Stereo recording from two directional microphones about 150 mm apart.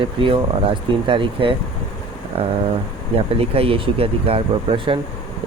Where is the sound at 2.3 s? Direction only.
40° right (ahead or behind).